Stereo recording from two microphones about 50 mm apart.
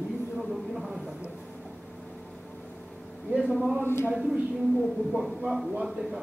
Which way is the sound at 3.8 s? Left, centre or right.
Left.